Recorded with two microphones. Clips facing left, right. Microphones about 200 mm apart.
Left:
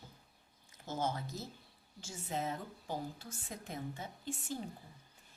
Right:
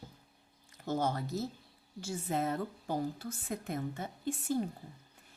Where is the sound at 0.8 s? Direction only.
60° right (ahead or behind).